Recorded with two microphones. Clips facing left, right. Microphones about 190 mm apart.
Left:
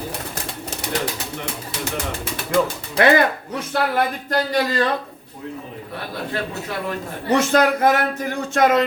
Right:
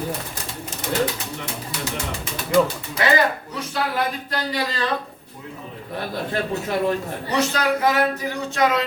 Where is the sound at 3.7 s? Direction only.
50° left (ahead or behind).